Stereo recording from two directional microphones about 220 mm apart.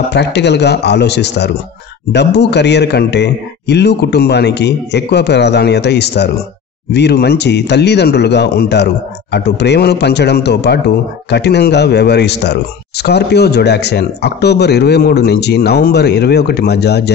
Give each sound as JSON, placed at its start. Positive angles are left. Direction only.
{"t": 0.1, "sound": "speech", "side_deg": 50}